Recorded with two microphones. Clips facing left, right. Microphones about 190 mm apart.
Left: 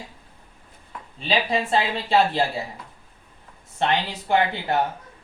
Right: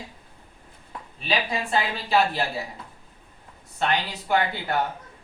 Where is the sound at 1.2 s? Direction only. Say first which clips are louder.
Left 4 dB; 30° left (ahead or behind).